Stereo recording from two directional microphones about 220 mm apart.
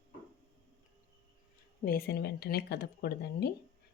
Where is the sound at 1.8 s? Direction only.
45° left (ahead or behind).